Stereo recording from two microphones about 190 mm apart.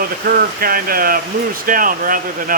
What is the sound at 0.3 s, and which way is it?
Speech, 50° right (ahead or behind).